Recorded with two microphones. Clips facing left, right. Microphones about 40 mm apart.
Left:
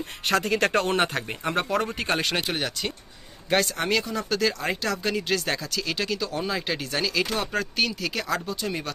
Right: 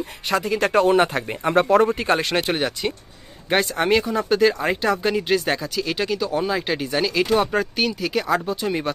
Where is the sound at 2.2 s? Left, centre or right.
Right.